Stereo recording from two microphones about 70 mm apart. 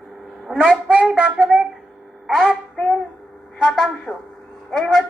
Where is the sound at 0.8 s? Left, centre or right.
Centre.